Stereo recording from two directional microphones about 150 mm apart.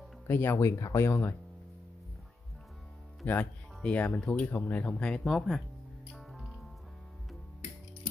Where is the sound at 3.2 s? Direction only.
10° left (ahead or behind).